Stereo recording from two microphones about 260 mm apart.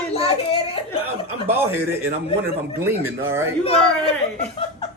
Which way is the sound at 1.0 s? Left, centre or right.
Centre.